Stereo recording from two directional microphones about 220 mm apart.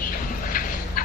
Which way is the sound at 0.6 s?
40° left (ahead or behind).